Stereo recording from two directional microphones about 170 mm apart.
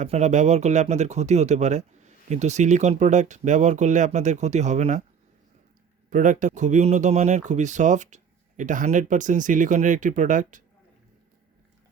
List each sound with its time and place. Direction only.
0.0 s speech: 45° right (ahead or behind)
6.1 s speech: 50° right (ahead or behind)